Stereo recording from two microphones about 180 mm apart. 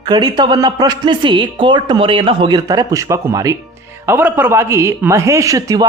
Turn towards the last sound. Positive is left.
turn(degrees=-20)  # may be behind; listen again after turning